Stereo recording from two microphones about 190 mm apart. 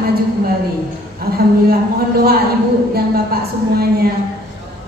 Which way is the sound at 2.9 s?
55° right (ahead or behind).